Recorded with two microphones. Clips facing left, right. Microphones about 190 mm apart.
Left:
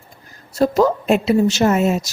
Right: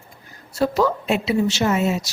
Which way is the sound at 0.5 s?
45° left (ahead or behind).